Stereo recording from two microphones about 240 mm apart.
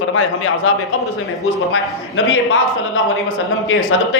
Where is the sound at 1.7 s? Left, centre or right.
Left.